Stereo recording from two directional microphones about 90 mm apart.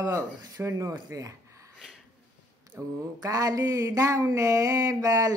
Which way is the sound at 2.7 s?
45° right (ahead or behind).